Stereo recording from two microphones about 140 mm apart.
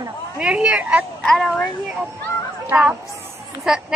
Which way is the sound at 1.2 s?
5° left (ahead or behind).